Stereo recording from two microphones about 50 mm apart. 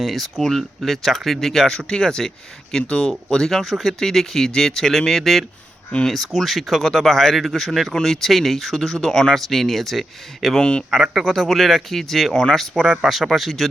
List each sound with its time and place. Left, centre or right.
0.0 s speech: centre
10.6 s speech: centre
10.9 s speech: centre